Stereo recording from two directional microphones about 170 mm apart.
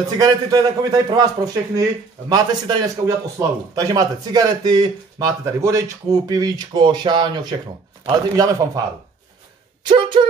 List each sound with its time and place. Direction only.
0.2 s a man's voice: 20° right (ahead or behind)
9.8 s a man's voice: 30° right (ahead or behind)